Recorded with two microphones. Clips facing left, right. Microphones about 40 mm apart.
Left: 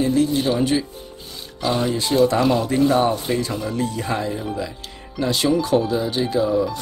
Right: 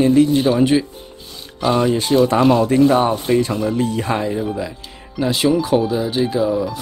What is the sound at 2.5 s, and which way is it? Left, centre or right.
Speech, right.